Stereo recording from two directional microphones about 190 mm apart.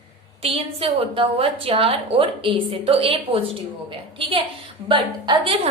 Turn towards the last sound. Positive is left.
turn(degrees=-30)  # may be behind; listen again after turning